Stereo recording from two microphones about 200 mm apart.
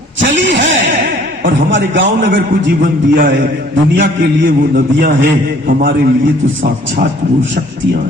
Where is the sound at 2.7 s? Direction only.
45° right (ahead or behind).